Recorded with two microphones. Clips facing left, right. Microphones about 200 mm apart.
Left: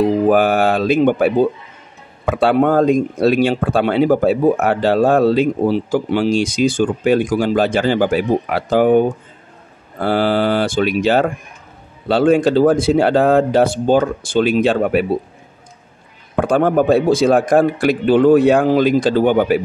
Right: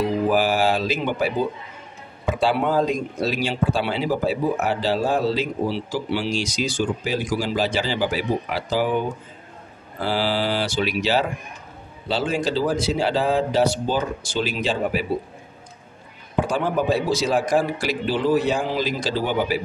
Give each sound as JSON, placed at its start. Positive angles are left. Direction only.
{"t": 0.0, "sound": "speech", "side_deg": 55}
{"t": 16.3, "sound": "speech", "side_deg": 55}